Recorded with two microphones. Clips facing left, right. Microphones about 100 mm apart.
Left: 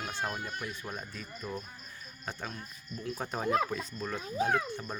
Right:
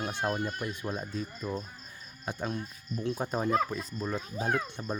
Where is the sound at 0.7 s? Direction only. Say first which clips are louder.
Right 6 dB; 15° right (ahead or behind).